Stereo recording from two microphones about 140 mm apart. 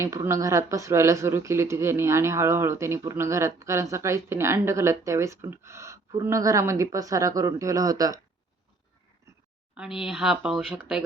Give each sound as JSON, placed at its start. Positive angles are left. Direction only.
{"t": 0.0, "sound": "speech", "side_deg": -20}
{"t": 9.7, "sound": "speech", "side_deg": -5}